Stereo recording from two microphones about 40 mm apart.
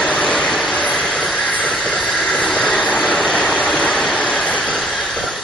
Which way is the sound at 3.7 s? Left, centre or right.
Centre.